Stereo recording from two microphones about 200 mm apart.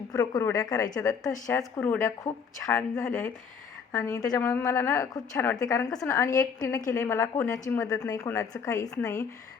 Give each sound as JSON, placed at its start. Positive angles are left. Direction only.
{"t": 0.1, "sound": "a woman's voice", "side_deg": 15}